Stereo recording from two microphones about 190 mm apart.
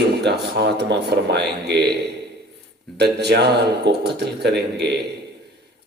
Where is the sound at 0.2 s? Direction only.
60° right (ahead or behind).